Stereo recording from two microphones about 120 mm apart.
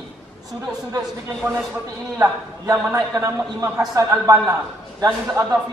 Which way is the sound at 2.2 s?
20° right (ahead or behind).